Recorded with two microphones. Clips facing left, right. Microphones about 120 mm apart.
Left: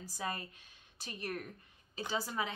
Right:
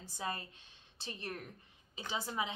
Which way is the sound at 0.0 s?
25° right (ahead or behind).